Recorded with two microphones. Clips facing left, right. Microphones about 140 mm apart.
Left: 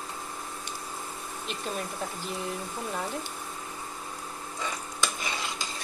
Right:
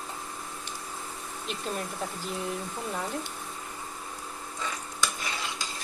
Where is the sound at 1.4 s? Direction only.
Centre (ahead or behind).